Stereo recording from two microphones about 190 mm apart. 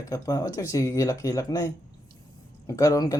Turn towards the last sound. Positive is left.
turn(degrees=20)  # may be behind; listen again after turning